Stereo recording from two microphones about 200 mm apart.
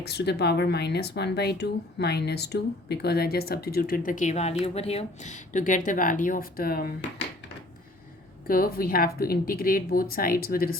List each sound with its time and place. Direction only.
0.0 s speech: 55° left (ahead or behind)
8.4 s speech: 45° left (ahead or behind)